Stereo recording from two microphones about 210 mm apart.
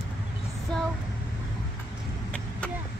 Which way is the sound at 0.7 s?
Centre (ahead or behind).